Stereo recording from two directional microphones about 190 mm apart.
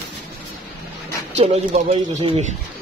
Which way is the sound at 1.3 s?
35° right (ahead or behind).